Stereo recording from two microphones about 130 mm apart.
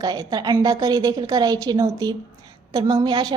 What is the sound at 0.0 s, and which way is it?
A woman's voice, 30° right (ahead or behind).